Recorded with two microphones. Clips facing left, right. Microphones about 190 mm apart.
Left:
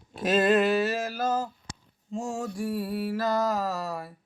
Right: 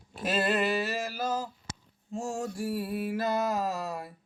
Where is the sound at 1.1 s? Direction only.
10° right (ahead or behind).